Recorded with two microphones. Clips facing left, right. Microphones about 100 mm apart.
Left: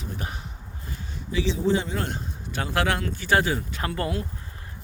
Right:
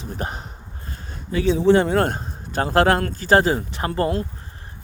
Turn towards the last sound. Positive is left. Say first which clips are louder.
# right 6 dB
turn(degrees=-35)  # may be behind; listen again after turning